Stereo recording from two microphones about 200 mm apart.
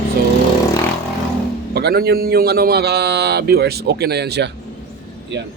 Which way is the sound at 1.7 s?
50° right (ahead or behind).